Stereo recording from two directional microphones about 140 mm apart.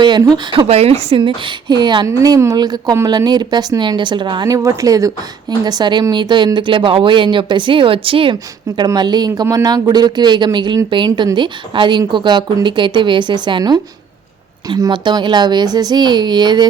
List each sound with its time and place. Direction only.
0.5 s a woman's voice: 40° right (ahead or behind)
1.7 s a woman's voice: 35° right (ahead or behind)